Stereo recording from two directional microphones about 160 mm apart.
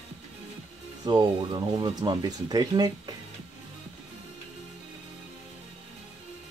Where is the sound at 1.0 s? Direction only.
25° right (ahead or behind).